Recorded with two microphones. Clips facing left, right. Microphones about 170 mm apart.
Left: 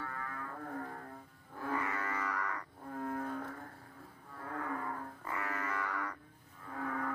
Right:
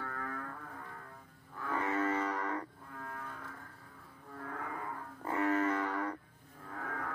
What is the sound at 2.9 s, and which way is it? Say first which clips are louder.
Livestock: left 8 dB; 45° left (ahead or behind).